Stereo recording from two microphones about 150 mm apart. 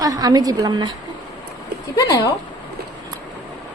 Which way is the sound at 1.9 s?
25° left (ahead or behind).